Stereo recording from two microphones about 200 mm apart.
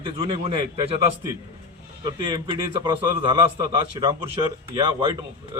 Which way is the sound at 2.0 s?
20° right (ahead or behind).